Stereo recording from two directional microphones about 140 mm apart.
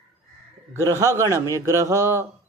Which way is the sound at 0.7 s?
20° right (ahead or behind).